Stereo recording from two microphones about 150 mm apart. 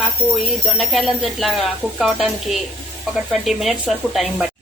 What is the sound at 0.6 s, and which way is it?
A woman's voice, centre (ahead or behind).